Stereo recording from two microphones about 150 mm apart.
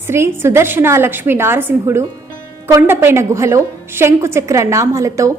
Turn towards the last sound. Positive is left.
turn(degrees=-20)  # may be behind; listen again after turning